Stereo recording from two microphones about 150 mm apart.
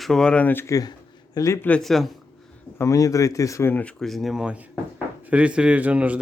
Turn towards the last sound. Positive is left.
turn(degrees=-10)  # may be behind; listen again after turning